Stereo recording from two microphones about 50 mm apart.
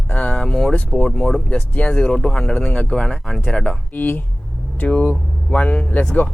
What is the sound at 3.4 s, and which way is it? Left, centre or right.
Speech, left.